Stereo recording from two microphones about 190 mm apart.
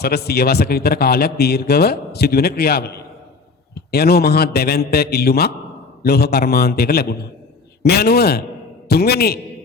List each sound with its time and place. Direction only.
0.0 s a man's voice: 55° left (ahead or behind)